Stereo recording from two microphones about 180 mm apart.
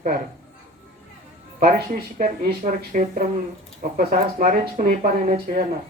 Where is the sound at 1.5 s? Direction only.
50° right (ahead or behind).